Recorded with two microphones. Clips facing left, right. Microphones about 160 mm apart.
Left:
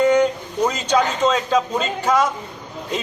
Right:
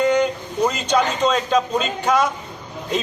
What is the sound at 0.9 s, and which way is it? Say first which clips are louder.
Speech: left 2 dB; 5° left (ahead or behind).